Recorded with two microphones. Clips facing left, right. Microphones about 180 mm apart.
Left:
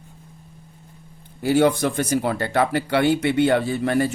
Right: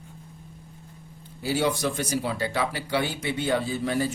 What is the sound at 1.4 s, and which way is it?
Speech, 55° left (ahead or behind).